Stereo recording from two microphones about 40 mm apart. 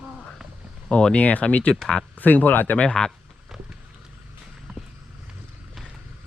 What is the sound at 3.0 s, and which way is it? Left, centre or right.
Speech, centre.